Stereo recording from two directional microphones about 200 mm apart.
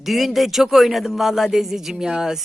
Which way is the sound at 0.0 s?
Centre (ahead or behind).